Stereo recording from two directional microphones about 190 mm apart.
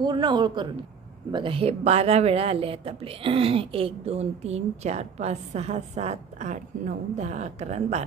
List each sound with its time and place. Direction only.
0.0 s speech: 25° right (ahead or behind)